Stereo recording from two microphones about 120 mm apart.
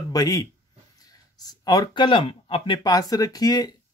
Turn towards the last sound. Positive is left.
turn(degrees=35)  # may be behind; listen again after turning